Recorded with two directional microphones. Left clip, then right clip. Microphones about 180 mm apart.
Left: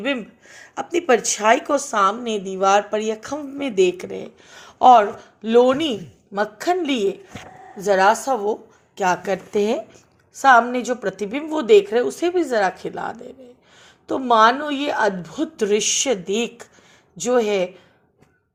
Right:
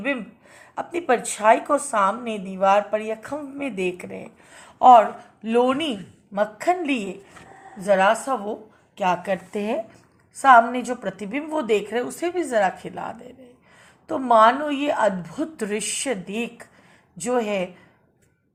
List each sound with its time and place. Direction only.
0.0 s a woman's voice: 40° left (ahead or behind)